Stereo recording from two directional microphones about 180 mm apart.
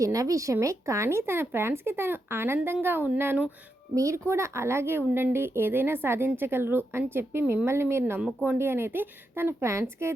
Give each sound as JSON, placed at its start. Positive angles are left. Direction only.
{"t": 0.0, "sound": "a woman's voice", "side_deg": -20}